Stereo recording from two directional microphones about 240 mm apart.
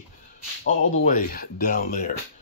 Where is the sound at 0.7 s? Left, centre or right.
Left.